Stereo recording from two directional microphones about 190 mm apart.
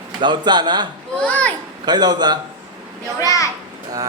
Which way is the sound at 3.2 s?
15° left (ahead or behind).